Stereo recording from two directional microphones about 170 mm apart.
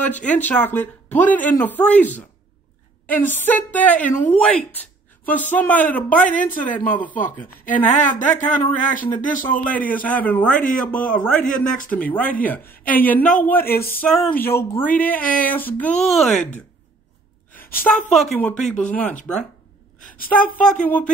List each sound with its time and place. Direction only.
0.0 s speech: 10° left (ahead or behind)
6.3 s speech: 50° left (ahead or behind)
6.7 s speech: 10° left (ahead or behind)
7.6 s speech: 50° left (ahead or behind)
9.5 s speech: 10° left (ahead or behind)
10.5 s speech: 50° left (ahead or behind)
11.1 s a sound: 5° left (ahead or behind)
11.4 s speech: 50° left (ahead or behind)
11.9 s speech: 10° left (ahead or behind)
14.0 s a sound: 5° left (ahead or behind)
14.4 s speech: 15° left (ahead or behind)
18.1 s a sound: centre (ahead or behind)
18.6 s speech: 5° left (ahead or behind)
20.6 s speech: 5° left (ahead or behind)